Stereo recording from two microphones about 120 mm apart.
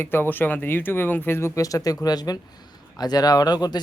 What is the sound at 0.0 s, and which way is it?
Speech, 15° left (ahead or behind).